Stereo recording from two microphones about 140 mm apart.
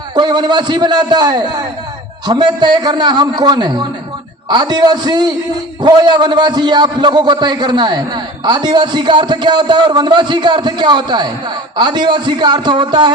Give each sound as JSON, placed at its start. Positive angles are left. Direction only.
{"t": 0.2, "sound": "a man's voice", "side_deg": -30}